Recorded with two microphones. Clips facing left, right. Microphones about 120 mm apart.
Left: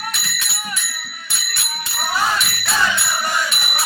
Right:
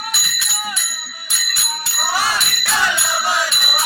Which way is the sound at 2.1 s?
80° right.